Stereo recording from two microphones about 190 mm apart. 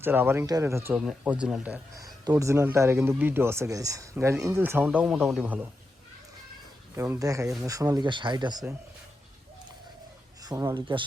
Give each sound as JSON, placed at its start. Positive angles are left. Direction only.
{"t": 0.0, "sound": "speech", "side_deg": -10}
{"t": 2.0, "sound": "speech", "side_deg": -20}
{"t": 6.9, "sound": "speech", "side_deg": -15}
{"t": 10.4, "sound": "speech", "side_deg": -20}